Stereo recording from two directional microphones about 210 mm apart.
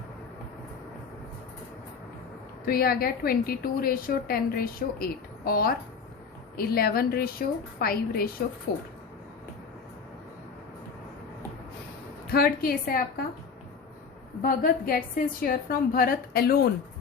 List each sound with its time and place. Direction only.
2.6 s a woman's voice: 45° left (ahead or behind)
12.3 s a woman's voice: 45° left (ahead or behind)
14.4 s a woman's voice: 45° left (ahead or behind)